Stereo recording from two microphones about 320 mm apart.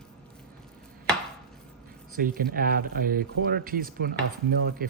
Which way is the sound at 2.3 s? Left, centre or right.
Right.